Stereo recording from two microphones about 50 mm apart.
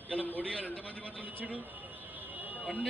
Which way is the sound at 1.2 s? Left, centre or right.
Right.